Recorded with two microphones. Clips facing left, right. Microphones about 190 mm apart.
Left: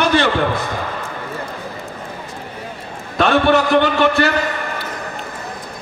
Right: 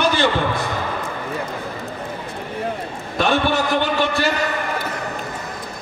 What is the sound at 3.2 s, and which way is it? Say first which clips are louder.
A man's voice: left 5 dB; 65° left (ahead or behind).